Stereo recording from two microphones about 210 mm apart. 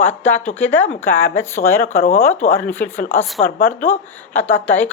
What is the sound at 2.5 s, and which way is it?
Speech, 10° left (ahead or behind).